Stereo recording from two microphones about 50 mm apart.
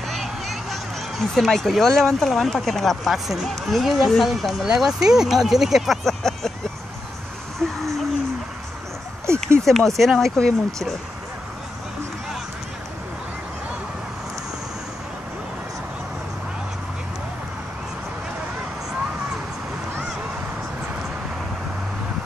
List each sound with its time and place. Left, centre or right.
0.1 s a sound: centre
2.1 s speech: centre
4.7 s speech: centre
6.0 s speech: centre
7.6 s speech: centre
9.2 s speech: right
9.7 s speech: centre